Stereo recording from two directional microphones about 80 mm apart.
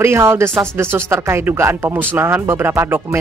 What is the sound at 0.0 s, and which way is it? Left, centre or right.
Speech, right.